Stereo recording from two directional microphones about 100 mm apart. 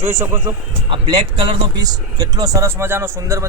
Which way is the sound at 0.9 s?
50° right (ahead or behind).